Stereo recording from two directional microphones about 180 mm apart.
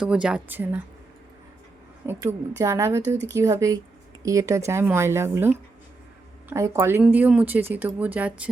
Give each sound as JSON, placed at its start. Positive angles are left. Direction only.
{"t": 0.0, "sound": "a woman's voice", "side_deg": -5}
{"t": 2.0, "sound": "a woman's voice", "side_deg": -15}